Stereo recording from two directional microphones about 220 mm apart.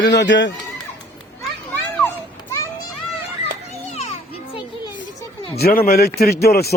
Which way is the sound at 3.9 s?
30° left (ahead or behind).